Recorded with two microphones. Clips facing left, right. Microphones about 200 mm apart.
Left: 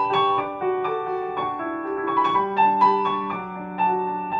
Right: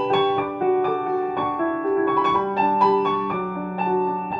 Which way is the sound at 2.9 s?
45° right (ahead or behind).